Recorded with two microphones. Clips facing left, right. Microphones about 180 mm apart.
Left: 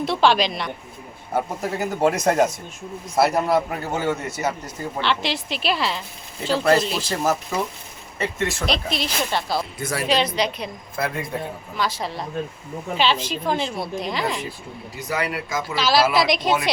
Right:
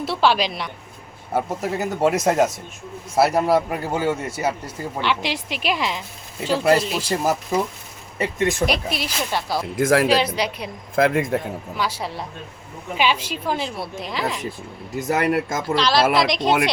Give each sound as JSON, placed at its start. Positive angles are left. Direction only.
{"t": 0.0, "sound": "a man's voice", "side_deg": -5}
{"t": 9.7, "sound": "speech", "side_deg": -90}
{"t": 10.1, "sound": "a man's voice", "side_deg": -10}
{"t": 10.9, "sound": "speech", "side_deg": -90}
{"t": 11.8, "sound": "a man's voice", "side_deg": -10}
{"t": 14.9, "sound": "speech", "side_deg": -50}
{"t": 15.7, "sound": "a woman's voice", "side_deg": 5}